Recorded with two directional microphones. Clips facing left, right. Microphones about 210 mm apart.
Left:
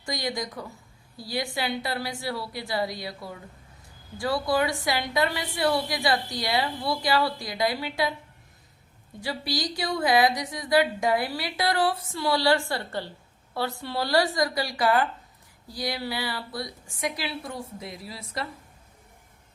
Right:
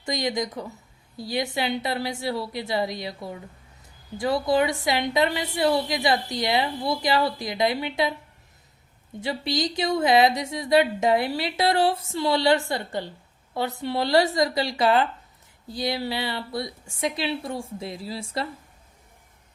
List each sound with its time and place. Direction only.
0.0 s a woman's voice: 20° right (ahead or behind)
9.2 s a woman's voice: 20° right (ahead or behind)